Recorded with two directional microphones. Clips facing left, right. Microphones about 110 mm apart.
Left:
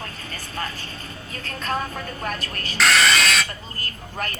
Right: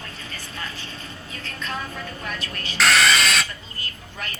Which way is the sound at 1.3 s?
45° left (ahead or behind).